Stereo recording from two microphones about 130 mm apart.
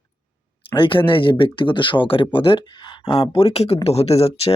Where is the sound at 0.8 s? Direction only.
40° left (ahead or behind).